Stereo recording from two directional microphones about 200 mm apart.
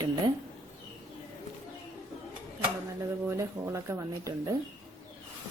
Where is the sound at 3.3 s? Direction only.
15° right (ahead or behind).